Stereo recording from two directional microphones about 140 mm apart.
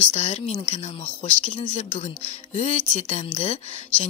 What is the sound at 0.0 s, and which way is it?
Speech, 50° left (ahead or behind).